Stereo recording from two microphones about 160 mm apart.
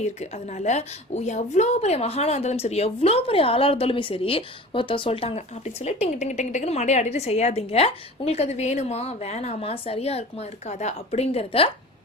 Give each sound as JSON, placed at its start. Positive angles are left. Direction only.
{"t": 0.2, "sound": "a woman's voice", "side_deg": 45}